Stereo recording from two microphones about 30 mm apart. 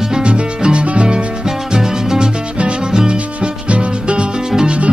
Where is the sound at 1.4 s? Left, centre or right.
Right.